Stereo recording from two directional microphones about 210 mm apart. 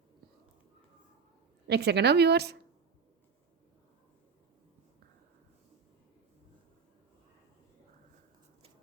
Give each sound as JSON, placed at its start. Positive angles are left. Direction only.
{"t": 1.6, "sound": "speech", "side_deg": -50}